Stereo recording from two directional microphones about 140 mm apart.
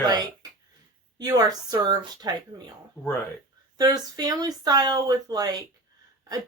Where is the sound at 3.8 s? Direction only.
30° right (ahead or behind).